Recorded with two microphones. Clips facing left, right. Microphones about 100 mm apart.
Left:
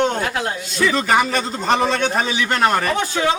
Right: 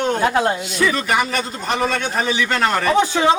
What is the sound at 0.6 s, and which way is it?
Speech, 15° right (ahead or behind).